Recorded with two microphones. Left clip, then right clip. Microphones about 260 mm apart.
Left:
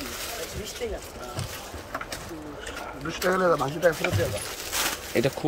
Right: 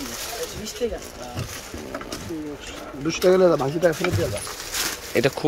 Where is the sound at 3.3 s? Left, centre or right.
Right.